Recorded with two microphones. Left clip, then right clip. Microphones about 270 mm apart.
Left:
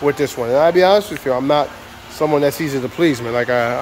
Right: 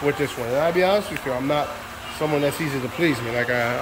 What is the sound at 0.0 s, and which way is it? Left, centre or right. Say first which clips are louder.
Speech: left 6 dB; centre.